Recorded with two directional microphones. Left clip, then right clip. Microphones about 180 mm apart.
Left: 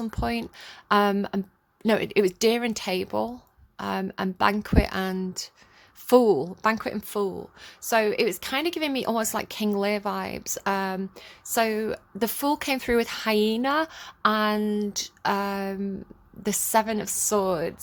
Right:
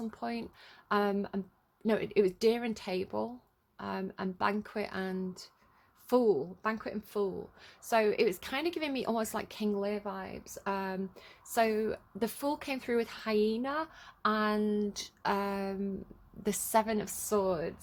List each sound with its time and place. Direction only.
0.0 s a woman's voice: 30° left (ahead or behind)